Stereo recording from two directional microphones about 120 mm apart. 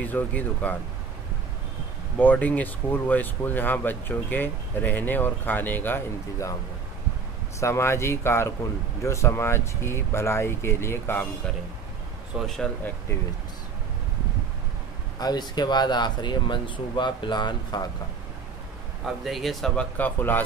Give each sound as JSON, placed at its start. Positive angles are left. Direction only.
{"t": 0.0, "sound": "speech", "side_deg": 15}
{"t": 2.1, "sound": "speech", "side_deg": 15}
{"t": 7.6, "sound": "speech", "side_deg": 25}
{"t": 12.4, "sound": "speech", "side_deg": 5}
{"t": 15.1, "sound": "speech", "side_deg": 35}
{"t": 19.0, "sound": "speech", "side_deg": 0}
{"t": 20.0, "sound": "speech", "side_deg": 15}